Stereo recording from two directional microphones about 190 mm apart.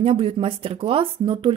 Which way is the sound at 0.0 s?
30° right (ahead or behind).